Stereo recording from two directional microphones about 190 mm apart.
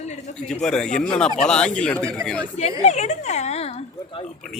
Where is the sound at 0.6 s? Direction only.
5° left (ahead or behind).